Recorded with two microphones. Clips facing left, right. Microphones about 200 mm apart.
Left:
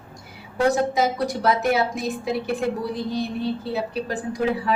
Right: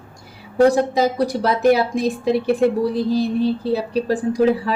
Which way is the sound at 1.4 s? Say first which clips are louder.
Right 5 dB; 35° right (ahead or behind).